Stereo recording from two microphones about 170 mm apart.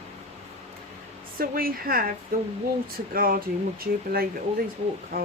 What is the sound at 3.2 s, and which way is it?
Speech, 60° right (ahead or behind).